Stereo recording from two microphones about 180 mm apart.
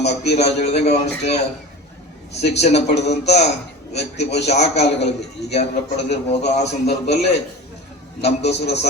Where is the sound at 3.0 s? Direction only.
65° left (ahead or behind).